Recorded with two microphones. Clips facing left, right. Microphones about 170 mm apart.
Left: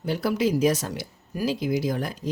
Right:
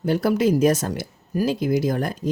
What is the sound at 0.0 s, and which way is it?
Speech, 50° right (ahead or behind).